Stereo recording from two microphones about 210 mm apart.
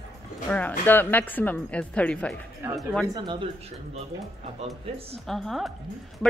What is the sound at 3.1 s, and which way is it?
Speech, 20° right (ahead or behind).